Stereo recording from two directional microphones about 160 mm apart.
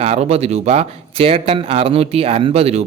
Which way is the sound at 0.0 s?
40° right (ahead or behind).